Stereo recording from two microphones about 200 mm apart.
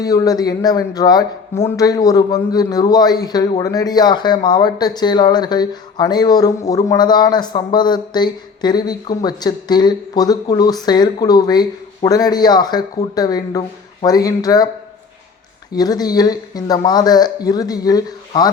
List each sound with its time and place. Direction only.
0.0 s speech: 20° left (ahead or behind)
15.7 s speech: 20° left (ahead or behind)